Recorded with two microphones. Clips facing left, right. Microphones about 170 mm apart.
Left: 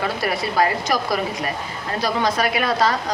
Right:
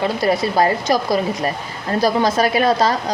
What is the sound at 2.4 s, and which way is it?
Speech, 35° right (ahead or behind).